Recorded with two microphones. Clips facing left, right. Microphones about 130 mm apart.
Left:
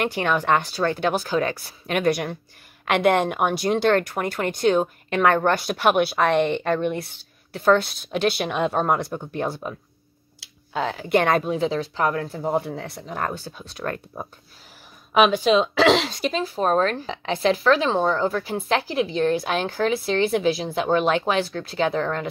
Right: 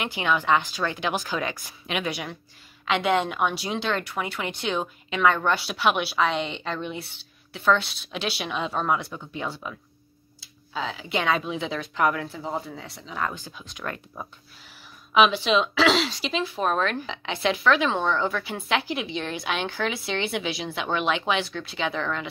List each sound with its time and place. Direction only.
0.2 s speech: 45° left (ahead or behind)
13.3 s speech: 35° left (ahead or behind)